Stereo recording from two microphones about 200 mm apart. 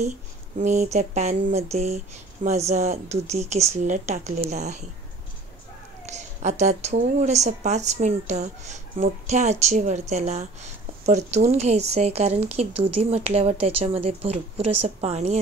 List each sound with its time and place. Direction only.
0.6 s speech: 35° right (ahead or behind)
6.0 s speech: 35° right (ahead or behind)